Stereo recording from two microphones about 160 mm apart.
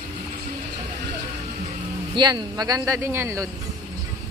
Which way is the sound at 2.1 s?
25° right (ahead or behind).